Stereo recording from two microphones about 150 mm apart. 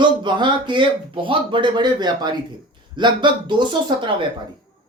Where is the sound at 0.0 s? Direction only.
30° right (ahead or behind).